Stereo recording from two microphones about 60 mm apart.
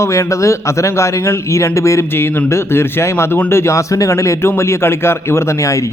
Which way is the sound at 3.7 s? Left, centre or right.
Left.